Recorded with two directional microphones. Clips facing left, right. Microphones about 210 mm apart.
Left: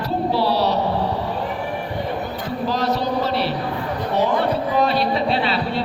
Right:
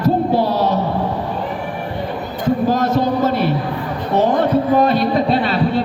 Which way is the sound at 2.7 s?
50° right (ahead or behind).